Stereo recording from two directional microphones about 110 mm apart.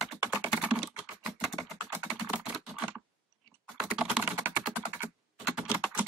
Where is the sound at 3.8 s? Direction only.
5° right (ahead or behind).